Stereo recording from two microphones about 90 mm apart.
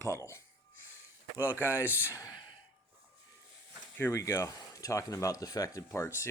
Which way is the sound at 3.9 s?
25° left (ahead or behind).